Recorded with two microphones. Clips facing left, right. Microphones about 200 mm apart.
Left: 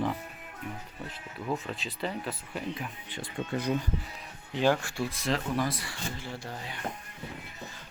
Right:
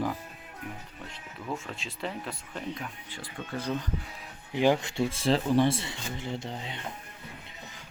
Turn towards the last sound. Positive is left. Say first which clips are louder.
# right 3 dB
turn(degrees=-20)  # may be behind; listen again after turning